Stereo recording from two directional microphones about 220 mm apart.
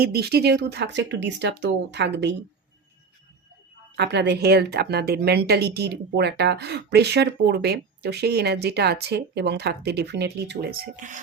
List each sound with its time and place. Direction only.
0.0 s a woman's voice: 45° right (ahead or behind)
3.9 s a woman's voice: 50° right (ahead or behind); by 11.2 s 35° right (ahead or behind)